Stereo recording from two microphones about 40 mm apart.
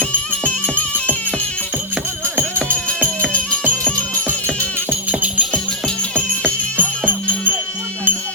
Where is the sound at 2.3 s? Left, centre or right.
Right.